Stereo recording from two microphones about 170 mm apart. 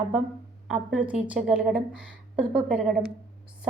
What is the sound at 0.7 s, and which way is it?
A woman's voice, 5° right (ahead or behind).